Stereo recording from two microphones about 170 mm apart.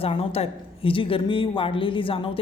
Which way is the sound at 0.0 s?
35° left (ahead or behind).